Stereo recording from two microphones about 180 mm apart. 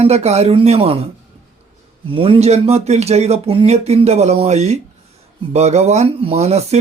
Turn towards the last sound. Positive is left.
turn(degrees=-35)  # may be behind; listen again after turning